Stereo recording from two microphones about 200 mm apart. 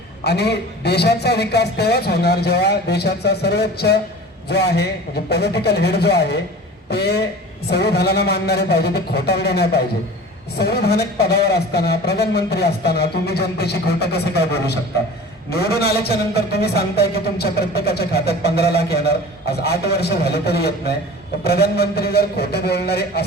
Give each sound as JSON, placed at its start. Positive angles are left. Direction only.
{"t": 0.3, "sound": "a man's voice", "side_deg": 55}
{"t": 15.4, "sound": "a man's voice", "side_deg": 50}